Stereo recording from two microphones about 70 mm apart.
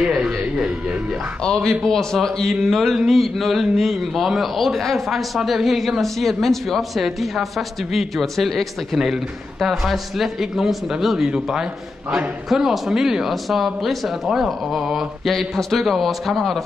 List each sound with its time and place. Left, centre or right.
0.0 s music: centre
1.4 s a man's voice: centre